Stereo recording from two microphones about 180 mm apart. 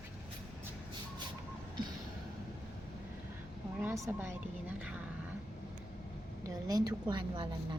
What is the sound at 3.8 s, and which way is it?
A woman's voice, 10° right (ahead or behind).